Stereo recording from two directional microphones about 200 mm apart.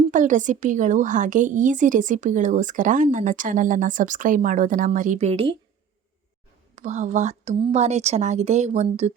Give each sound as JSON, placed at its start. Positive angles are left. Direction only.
{"t": 0.1, "sound": "speech", "side_deg": -40}
{"t": 6.7, "sound": "speech", "side_deg": -35}